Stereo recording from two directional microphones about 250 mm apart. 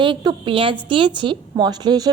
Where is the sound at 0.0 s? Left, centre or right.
Centre.